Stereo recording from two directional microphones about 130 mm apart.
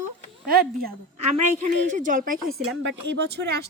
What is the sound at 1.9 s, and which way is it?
Speech, 80° right.